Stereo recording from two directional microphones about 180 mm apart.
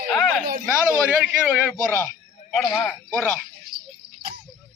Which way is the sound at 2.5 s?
5° right (ahead or behind).